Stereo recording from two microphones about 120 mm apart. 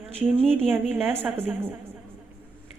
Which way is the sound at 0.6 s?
15° right (ahead or behind).